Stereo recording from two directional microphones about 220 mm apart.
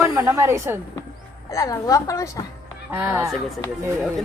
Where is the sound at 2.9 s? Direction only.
10° right (ahead or behind).